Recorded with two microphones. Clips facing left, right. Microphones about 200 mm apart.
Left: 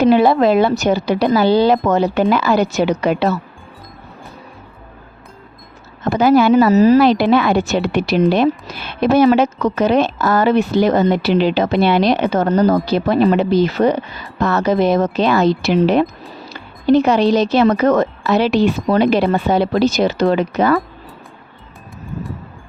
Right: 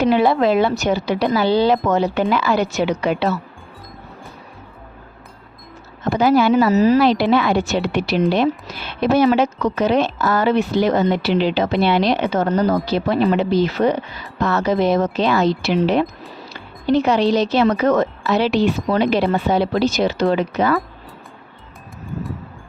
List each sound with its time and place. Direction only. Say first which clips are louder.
0.0 s speech: left 4 dB; 40° left (ahead or behind)
6.1 s speech: left 3 dB; 50° left (ahead or behind)